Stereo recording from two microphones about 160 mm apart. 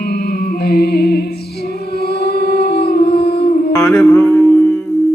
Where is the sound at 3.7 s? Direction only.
15° left (ahead or behind).